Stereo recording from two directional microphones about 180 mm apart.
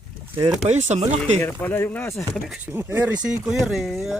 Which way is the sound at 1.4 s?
10° left (ahead or behind).